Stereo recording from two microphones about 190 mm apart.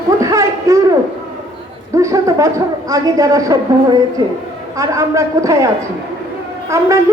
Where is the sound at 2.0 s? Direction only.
15° right (ahead or behind).